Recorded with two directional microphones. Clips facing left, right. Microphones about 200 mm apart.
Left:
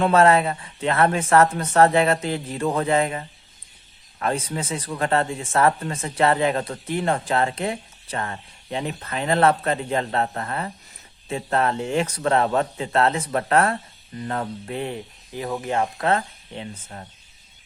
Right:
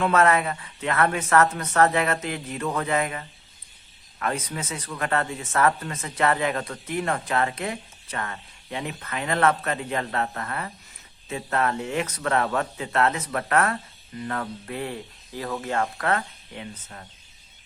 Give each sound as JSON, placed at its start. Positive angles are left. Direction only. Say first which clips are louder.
{"t": 0.0, "sound": "speech", "louder": "left 4 dB", "side_deg": 30}